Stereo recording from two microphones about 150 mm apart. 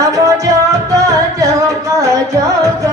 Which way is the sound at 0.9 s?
25° right (ahead or behind).